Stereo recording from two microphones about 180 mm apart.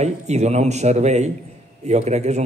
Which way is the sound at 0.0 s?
40° right (ahead or behind).